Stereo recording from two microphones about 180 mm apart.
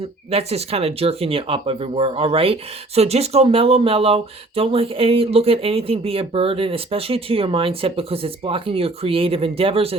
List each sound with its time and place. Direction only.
0.3 s speech: 35° right (ahead or behind)